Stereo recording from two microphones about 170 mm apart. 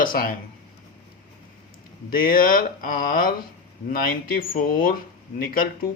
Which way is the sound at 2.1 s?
55° left (ahead or behind).